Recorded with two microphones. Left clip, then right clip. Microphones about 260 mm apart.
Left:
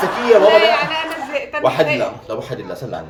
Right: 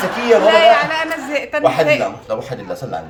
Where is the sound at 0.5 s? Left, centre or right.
Centre.